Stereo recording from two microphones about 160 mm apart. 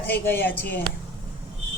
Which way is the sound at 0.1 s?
10° left (ahead or behind).